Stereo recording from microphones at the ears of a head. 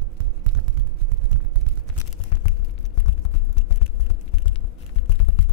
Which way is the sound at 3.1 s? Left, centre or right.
Left.